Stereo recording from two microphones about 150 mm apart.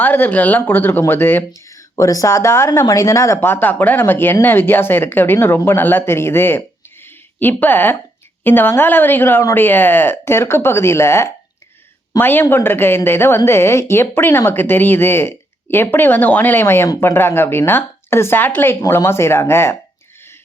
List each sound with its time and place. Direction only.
0.0 s speech: 10° left (ahead or behind)